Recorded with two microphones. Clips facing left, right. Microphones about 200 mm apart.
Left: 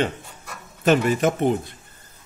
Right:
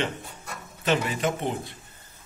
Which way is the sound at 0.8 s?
45° left (ahead or behind).